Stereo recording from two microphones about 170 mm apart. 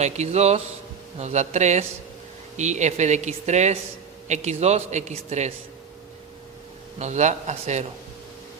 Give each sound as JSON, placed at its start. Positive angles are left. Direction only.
{"t": 0.0, "sound": "a man's voice", "side_deg": -40}
{"t": 7.0, "sound": "a woman's voice", "side_deg": -45}